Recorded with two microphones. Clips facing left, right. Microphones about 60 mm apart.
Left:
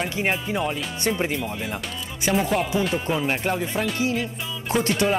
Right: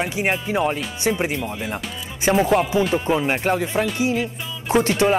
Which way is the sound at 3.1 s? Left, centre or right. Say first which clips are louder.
Right 4 dB; centre.